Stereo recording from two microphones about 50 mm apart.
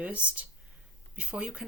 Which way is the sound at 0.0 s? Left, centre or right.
Right.